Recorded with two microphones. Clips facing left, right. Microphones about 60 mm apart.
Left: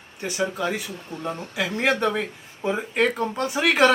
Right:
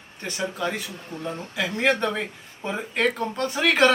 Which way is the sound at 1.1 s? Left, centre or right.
Left.